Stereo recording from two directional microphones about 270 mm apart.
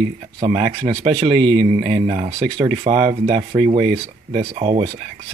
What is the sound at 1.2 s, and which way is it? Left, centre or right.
Speech, centre.